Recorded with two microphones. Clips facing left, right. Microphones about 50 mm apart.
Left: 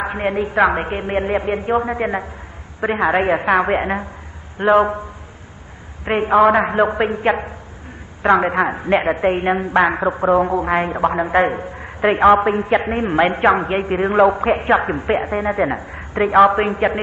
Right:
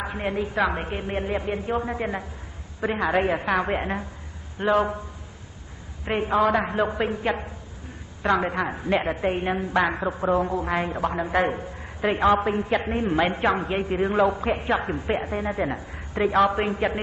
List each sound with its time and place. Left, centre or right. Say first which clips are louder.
0.0 s a man's voice: left 7 dB; left
6.0 s a man's voice: left 8 dB; left